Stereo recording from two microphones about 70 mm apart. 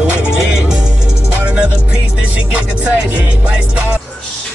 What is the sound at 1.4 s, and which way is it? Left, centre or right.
Music, centre.